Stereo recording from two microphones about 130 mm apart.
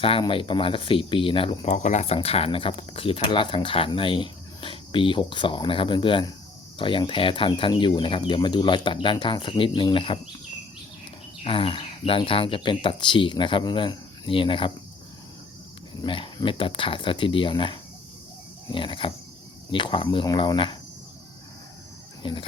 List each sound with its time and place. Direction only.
0.0 s speech: 45° left (ahead or behind)
1.6 s speech: 75° left (ahead or behind); by 10.2 s 40° left (ahead or behind)
11.4 s speech: 45° left (ahead or behind)
16.0 s speech: 40° left (ahead or behind)
22.2 s cricket: 40° left (ahead or behind)